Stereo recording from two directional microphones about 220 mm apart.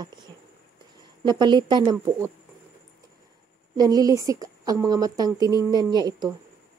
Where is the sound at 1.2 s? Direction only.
20° right (ahead or behind).